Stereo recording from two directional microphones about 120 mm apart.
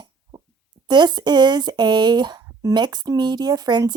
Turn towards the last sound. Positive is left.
turn(degrees=-35)  # may be behind; listen again after turning